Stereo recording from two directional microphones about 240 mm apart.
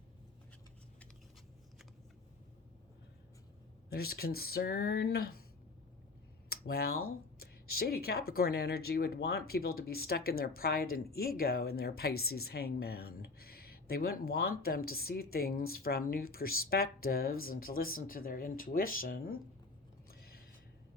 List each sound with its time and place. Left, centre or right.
3.8 s speech: left
6.5 s speech: left
20.1 s a sound: left